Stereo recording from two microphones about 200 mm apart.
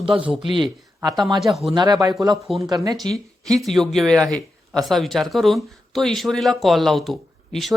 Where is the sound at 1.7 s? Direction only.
20° right (ahead or behind).